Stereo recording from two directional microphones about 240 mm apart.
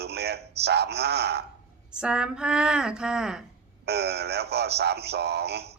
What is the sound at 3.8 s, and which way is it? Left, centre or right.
A man's voice, right.